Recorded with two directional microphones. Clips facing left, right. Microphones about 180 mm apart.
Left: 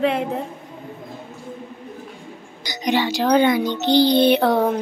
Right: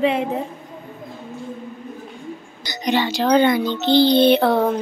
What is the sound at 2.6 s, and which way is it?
A child's voice, 15° left (ahead or behind).